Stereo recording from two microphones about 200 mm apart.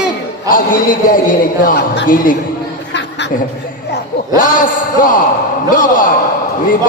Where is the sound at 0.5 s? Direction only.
45° left (ahead or behind).